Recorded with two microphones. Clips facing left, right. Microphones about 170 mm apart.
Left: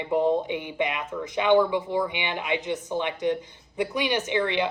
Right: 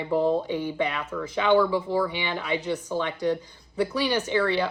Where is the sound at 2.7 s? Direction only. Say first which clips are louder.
Even; 20° left (ahead or behind).